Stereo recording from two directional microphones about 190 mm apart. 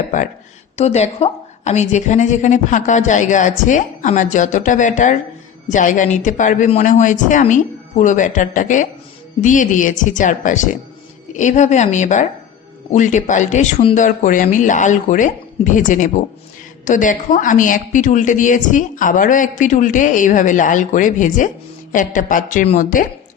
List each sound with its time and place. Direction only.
0.8 s a woman's voice: 35° left (ahead or behind)